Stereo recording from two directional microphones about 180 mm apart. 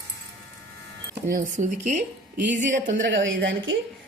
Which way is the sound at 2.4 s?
85° right.